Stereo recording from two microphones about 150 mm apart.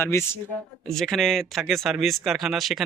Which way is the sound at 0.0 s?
15° left (ahead or behind).